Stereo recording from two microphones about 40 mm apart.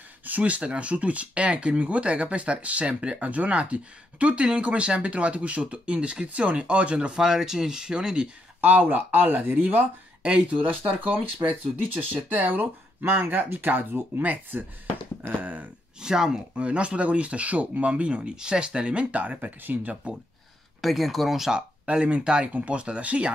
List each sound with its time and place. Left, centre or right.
0.4 s speech: right
3.2 s speech: right
7.2 s speech: centre
8.5 s speech: right
10.2 s speech: right
10.6 s speech: right
14.2 s speech: right
16.0 s speech: centre
16.5 s speech: right
20.8 s speech: centre
21.8 s speech: right